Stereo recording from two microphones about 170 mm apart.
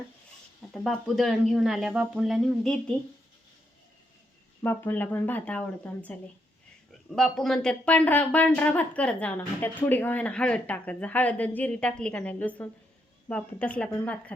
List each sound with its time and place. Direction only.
0.7 s speech: centre (ahead or behind)
4.6 s speech: 10° left (ahead or behind)
7.2 s speech: 5° left (ahead or behind)